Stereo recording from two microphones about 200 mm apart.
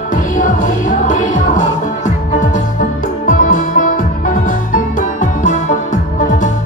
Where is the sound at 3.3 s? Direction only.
40° left (ahead or behind).